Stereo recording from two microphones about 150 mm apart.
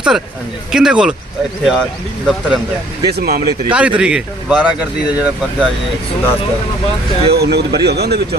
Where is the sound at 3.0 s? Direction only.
90° right.